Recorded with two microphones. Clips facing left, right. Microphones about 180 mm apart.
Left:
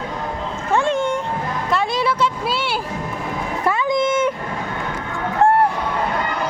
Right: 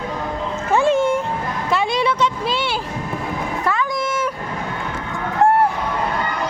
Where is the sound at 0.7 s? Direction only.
5° right (ahead or behind).